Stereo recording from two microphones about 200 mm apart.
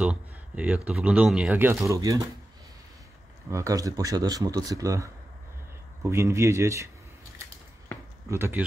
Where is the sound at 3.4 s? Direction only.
15° right (ahead or behind).